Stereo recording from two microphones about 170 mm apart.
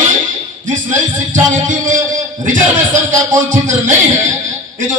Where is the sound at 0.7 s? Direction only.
50° right (ahead or behind).